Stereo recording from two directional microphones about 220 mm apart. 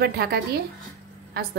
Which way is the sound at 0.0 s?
45° right (ahead or behind).